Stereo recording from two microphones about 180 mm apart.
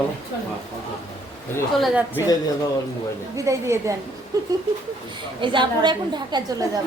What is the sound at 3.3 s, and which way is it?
A woman's voice, 15° right (ahead or behind).